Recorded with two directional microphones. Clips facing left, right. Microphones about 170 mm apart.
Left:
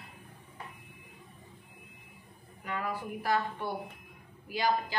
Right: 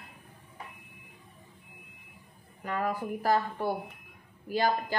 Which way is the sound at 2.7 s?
45° right (ahead or behind).